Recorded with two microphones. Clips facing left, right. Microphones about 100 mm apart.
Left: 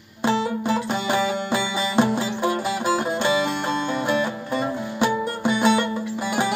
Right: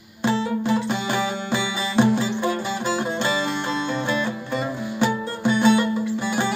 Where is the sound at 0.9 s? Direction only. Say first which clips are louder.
Left 2 dB; 45° left (ahead or behind).